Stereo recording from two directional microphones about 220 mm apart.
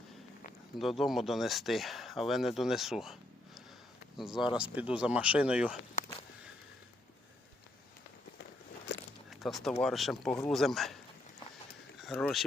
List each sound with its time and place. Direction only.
0.8 s speech: centre (ahead or behind)
4.2 s speech: centre (ahead or behind)
8.9 s a sound: 50° left (ahead or behind)
9.3 s speech: centre (ahead or behind)
11.9 s speech: centre (ahead or behind)